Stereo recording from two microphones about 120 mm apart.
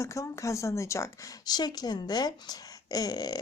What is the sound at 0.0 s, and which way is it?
A woman's voice, 25° left (ahead or behind).